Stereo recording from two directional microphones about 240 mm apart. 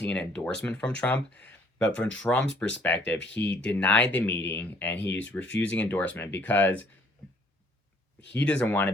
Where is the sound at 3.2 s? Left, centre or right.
Left.